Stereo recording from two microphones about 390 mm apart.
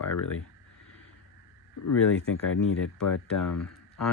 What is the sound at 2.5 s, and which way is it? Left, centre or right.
Speech, left.